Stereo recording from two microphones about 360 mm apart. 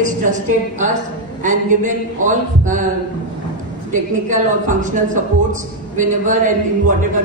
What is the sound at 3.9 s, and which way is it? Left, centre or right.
A man's voice, right.